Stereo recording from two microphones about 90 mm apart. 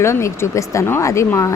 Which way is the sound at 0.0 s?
30° left (ahead or behind).